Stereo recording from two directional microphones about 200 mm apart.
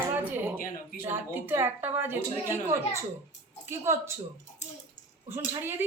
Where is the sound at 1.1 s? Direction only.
10° right (ahead or behind).